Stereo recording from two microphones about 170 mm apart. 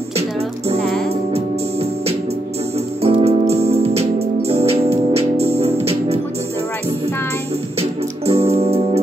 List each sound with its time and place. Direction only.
0.7 s music: centre (ahead or behind)
3.0 s music: 35° right (ahead or behind)
8.3 s keyboard: 35° right (ahead or behind)